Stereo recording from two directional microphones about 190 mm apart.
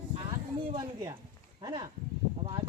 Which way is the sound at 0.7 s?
20° right (ahead or behind).